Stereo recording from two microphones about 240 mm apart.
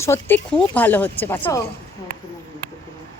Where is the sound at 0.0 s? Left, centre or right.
Centre.